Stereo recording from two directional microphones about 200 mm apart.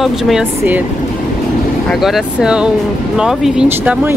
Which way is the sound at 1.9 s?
Centre (ahead or behind).